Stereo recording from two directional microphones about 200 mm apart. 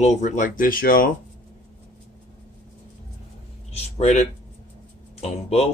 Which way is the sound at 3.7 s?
35° left (ahead or behind).